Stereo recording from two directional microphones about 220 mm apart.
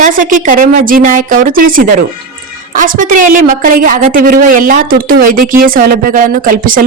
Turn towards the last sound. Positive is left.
turn(degrees=-40)  # may be behind; listen again after turning